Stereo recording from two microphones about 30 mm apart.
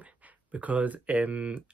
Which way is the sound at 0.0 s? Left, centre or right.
Right.